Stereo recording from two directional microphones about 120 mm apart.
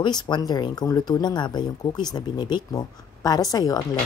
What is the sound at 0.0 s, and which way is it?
Speech, 35° left (ahead or behind).